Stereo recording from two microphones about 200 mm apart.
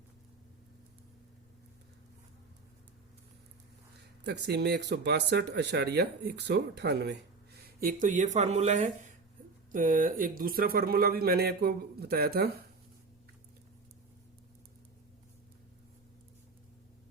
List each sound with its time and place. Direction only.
4.2 s speech: 60° right (ahead or behind)